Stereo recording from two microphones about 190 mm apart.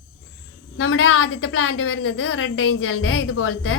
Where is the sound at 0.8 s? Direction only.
90° left.